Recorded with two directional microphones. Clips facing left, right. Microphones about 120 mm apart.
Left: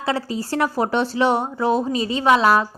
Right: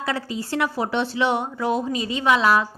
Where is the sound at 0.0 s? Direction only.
35° left (ahead or behind).